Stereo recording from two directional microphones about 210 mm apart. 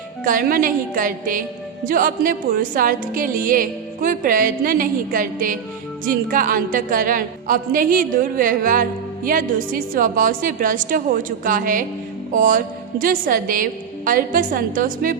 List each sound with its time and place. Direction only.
0.3 s a woman's voice: 40° right (ahead or behind)